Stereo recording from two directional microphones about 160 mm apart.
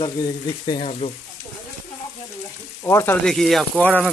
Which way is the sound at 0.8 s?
45° left (ahead or behind).